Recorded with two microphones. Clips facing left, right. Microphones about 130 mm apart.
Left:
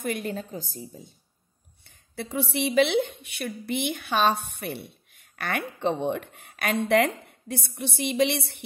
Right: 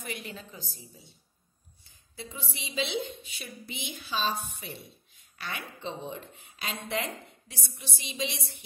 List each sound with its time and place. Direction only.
0.0 s a woman's voice: 50° left (ahead or behind)
1.9 s a woman's voice: 70° left (ahead or behind)